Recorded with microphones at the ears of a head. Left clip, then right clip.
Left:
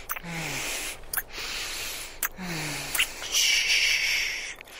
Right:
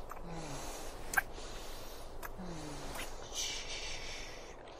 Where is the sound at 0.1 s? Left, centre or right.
Left.